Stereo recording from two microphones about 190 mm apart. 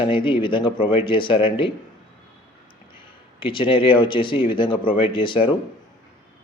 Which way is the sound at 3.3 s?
25° left (ahead or behind).